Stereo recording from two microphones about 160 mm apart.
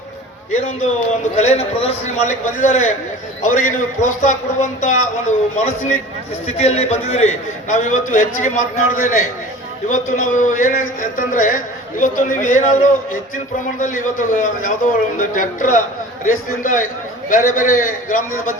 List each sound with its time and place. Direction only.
0.5 s a man's voice: 45° left (ahead or behind)